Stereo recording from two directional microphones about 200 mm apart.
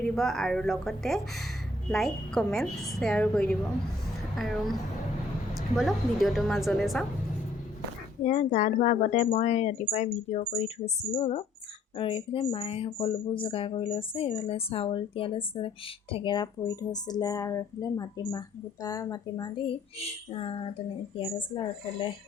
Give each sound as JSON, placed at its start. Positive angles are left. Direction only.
{"t": 0.0, "sound": "a woman's voice", "side_deg": 0}
{"t": 8.2, "sound": "speech", "side_deg": 40}
{"t": 20.0, "sound": "speech", "side_deg": 30}